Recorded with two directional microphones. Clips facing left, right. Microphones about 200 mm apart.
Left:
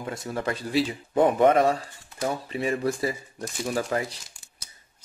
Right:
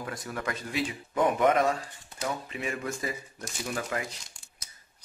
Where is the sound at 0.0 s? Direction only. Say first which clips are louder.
Left 5 dB; 25° left (ahead or behind).